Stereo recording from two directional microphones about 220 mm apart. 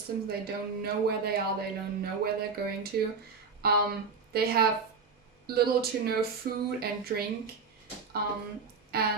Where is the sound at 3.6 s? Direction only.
45° right (ahead or behind).